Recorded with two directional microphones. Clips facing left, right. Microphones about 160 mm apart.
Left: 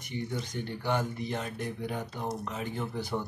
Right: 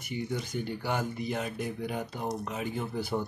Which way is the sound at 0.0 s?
10° right (ahead or behind).